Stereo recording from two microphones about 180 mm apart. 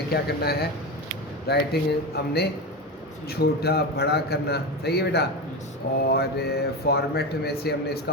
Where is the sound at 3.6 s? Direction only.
60° left (ahead or behind).